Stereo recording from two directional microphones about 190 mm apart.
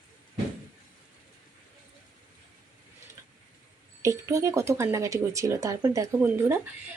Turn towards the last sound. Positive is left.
turn(degrees=-10)  # may be behind; listen again after turning